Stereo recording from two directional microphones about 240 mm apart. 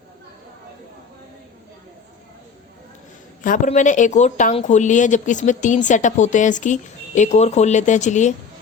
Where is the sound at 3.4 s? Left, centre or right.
Left.